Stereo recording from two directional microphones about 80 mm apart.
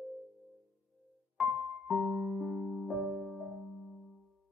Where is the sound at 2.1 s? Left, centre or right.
Centre.